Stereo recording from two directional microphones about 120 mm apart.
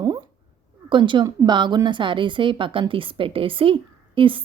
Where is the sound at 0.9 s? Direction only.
45° right (ahead or behind).